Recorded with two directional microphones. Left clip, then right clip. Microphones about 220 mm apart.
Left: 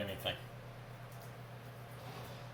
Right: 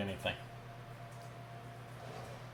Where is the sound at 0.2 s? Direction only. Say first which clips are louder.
Right 2 dB; 35° right (ahead or behind).